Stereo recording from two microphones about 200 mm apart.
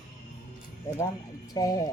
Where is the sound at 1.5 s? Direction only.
20° left (ahead or behind).